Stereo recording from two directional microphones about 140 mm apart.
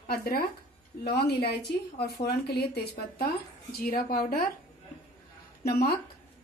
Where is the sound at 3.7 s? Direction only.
90° left.